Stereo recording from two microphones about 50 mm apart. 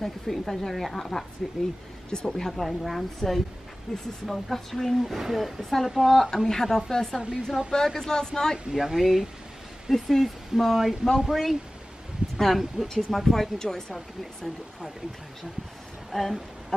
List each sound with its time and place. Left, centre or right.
0.0 s a woman's voice: centre
2.0 s a woman's voice: centre
7.2 s speech: centre
7.7 s speech: centre
8.7 s a woman's voice: centre
16.1 s a woman's voice: centre